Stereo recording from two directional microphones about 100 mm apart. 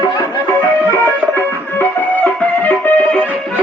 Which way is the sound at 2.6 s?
15° left (ahead or behind).